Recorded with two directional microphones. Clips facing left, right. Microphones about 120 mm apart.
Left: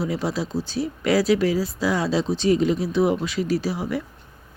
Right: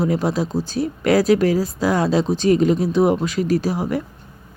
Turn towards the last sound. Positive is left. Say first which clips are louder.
# right 4 dB
turn(degrees=-45)  # may be behind; listen again after turning